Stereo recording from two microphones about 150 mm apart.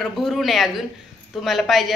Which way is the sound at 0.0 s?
Centre (ahead or behind).